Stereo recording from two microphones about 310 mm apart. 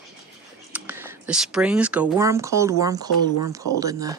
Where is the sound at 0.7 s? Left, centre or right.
Centre.